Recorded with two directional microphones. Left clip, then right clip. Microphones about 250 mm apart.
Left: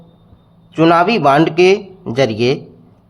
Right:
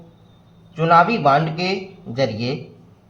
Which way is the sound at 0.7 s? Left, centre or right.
Left.